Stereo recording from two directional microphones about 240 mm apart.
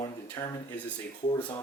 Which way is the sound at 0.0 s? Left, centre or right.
Centre.